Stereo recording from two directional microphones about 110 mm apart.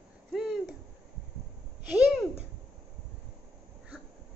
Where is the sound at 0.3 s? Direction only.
Centre (ahead or behind).